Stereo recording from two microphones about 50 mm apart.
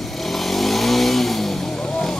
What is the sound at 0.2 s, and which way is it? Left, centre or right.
Vehicle, centre.